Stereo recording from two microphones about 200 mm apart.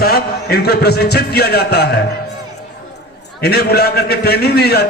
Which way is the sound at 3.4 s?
55° left (ahead or behind).